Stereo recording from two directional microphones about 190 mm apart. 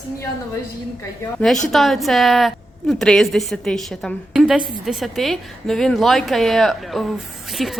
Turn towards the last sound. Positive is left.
turn(degrees=0)  # may be behind; listen again after turning